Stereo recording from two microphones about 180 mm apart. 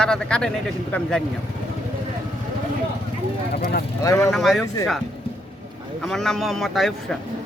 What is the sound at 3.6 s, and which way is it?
Speech, 55° left (ahead or behind).